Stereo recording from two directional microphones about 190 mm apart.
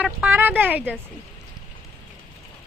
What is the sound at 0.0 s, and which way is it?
Speech, 10° right (ahead or behind).